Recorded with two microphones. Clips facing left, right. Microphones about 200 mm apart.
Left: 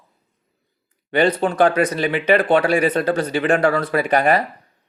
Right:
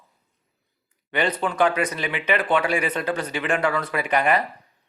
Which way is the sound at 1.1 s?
35° left (ahead or behind).